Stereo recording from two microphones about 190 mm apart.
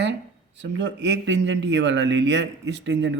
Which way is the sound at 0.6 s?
70° right (ahead or behind).